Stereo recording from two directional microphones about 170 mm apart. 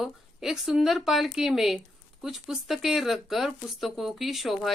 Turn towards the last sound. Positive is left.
turn(degrees=0)  # may be behind; listen again after turning